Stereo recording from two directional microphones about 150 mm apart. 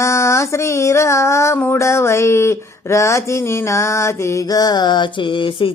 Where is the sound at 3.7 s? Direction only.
20° left (ahead or behind).